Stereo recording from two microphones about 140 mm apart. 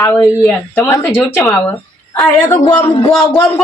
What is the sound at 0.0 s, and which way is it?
Speech, 20° left (ahead or behind).